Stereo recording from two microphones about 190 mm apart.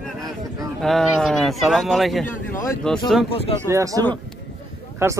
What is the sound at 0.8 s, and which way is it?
Speech, centre (ahead or behind).